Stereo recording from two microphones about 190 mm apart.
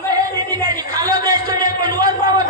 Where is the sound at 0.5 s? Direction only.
20° right (ahead or behind).